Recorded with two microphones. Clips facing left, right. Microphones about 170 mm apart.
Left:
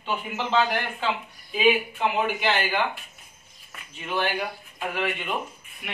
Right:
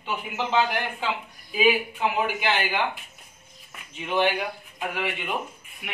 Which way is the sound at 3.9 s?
20° right (ahead or behind).